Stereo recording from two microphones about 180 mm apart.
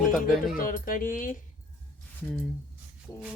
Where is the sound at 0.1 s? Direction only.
Centre (ahead or behind).